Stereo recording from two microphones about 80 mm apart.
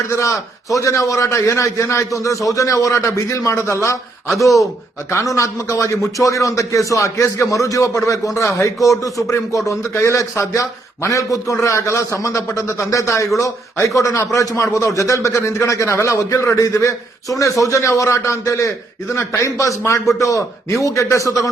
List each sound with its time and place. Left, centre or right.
0.2 s a man's voice: left
5.1 s a man's voice: left